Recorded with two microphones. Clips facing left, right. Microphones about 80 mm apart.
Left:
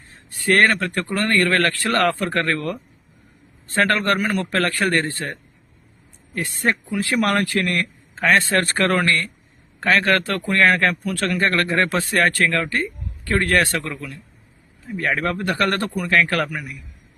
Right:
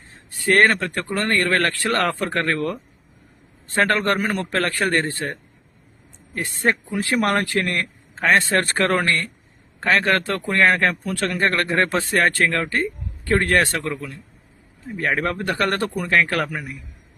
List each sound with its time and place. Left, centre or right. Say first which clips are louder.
0.3 s speech: even; right
3.8 s speech: even; centre
6.3 s a man's voice: right 1 dB; right